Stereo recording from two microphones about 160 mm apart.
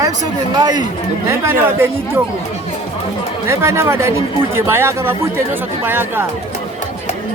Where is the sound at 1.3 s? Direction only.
15° right (ahead or behind).